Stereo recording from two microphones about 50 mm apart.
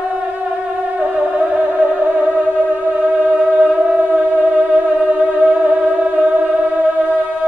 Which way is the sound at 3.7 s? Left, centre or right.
Right.